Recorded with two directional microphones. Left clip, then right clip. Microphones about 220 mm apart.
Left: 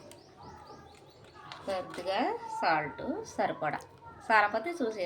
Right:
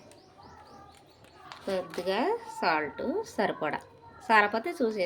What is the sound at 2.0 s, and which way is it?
A woman's voice, 40° right (ahead or behind).